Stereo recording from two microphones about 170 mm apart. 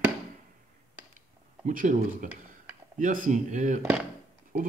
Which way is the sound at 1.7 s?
55° right (ahead or behind).